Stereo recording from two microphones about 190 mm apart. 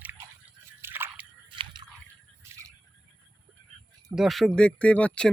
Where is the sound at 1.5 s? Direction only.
25° right (ahead or behind).